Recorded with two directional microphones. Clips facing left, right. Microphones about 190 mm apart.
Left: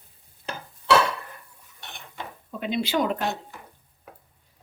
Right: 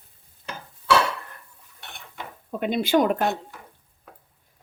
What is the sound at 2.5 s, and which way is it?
Speech, 50° right (ahead or behind).